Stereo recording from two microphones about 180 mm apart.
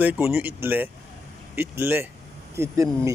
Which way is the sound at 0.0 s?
10° right (ahead or behind).